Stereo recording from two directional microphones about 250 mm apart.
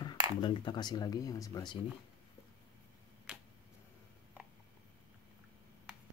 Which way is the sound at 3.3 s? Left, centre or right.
Centre.